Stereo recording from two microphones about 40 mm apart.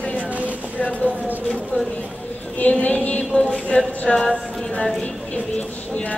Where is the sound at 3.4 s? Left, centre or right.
Left.